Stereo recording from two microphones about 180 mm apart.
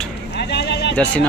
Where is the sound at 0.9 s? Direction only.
5° left (ahead or behind).